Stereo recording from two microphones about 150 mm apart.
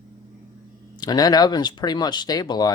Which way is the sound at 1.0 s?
25° left (ahead or behind).